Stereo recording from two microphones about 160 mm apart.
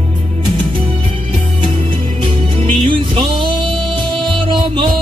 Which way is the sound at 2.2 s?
35° right (ahead or behind).